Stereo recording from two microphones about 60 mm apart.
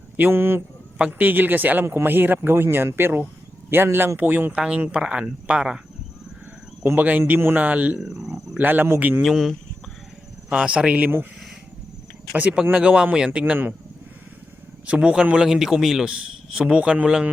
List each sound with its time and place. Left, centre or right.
0.2 s speech: right
0.9 s speech: right
4.5 s speech: centre
7.0 s a man's voice: right
7.9 s speech: centre
8.5 s speech: right
9.2 s speech: centre
10.5 s a man's voice: centre
12.7 s speech: centre
13.4 s speech: right
14.8 s speech: centre
16.6 s speech: centre